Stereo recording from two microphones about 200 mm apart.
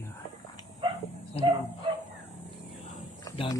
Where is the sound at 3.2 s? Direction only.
20° left (ahead or behind).